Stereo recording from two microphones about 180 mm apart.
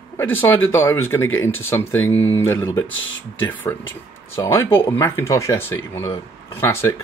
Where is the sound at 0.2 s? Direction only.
10° left (ahead or behind).